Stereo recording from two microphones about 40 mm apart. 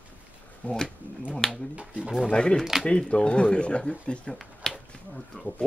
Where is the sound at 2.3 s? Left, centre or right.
Left.